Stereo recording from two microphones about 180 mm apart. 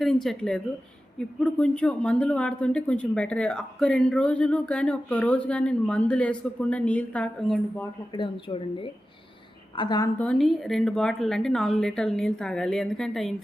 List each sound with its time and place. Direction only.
0.0 s speech: centre (ahead or behind)
8.1 s speech: 25° left (ahead or behind)
10.2 s speech: 5° left (ahead or behind)